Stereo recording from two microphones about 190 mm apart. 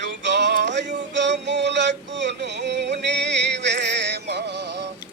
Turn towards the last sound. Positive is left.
turn(degrees=-60)  # may be behind; listen again after turning